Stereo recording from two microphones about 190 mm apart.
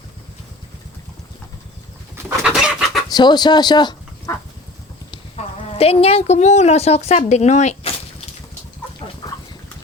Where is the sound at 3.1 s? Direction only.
20° left (ahead or behind).